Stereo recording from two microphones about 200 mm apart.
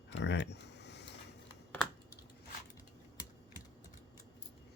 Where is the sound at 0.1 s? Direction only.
65° left (ahead or behind).